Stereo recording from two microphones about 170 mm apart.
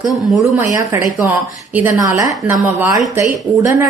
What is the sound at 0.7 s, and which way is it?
A woman's voice, 15° right (ahead or behind).